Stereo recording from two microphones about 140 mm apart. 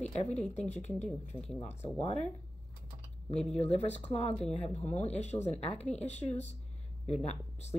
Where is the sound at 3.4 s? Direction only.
50° left (ahead or behind).